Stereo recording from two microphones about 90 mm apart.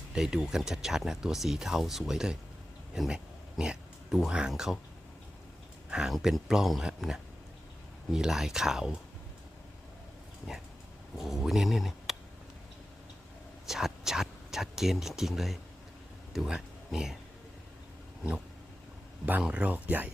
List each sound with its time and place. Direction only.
0.1 s speech: 5° right (ahead or behind)
5.9 s speech: 5° right (ahead or behind)
11.2 s speech: centre (ahead or behind)
13.7 s speech: 5° right (ahead or behind)
19.2 s speech: 15° right (ahead or behind)